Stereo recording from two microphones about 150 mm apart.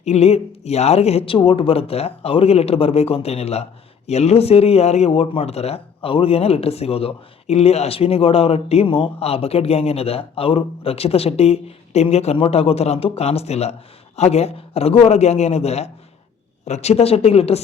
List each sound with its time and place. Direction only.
0.0 s a woman's voice: 45° left (ahead or behind)